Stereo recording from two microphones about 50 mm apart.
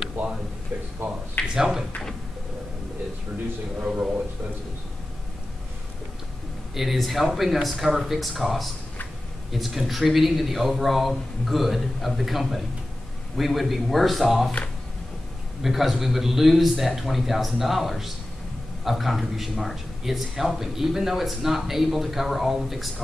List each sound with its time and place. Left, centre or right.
1.0 s speech: right
1.5 s speech: centre
3.8 s speech: right
6.7 s speech: centre
15.6 s speech: centre